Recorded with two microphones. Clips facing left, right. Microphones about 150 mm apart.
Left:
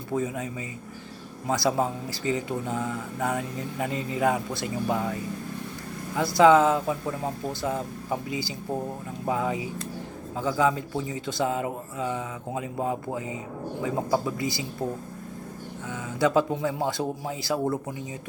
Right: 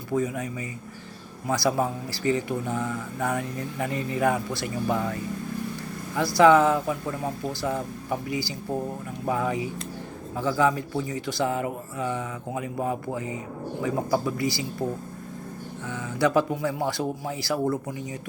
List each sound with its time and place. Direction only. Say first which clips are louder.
0.1 s speech: right 2 dB; 20° left (ahead or behind)
6.1 s speech: even; 20° left (ahead or behind)
15.9 s speech: even; 20° left (ahead or behind)